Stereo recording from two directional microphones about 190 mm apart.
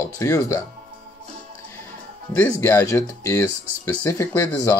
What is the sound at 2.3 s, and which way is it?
Speech, 15° left (ahead or behind).